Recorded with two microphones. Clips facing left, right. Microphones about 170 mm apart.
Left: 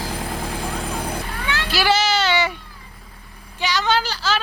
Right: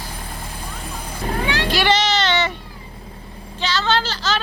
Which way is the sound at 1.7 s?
5° left (ahead or behind).